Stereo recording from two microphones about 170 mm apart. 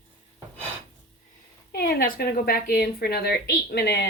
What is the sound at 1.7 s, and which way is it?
A woman's voice, 60° left (ahead or behind).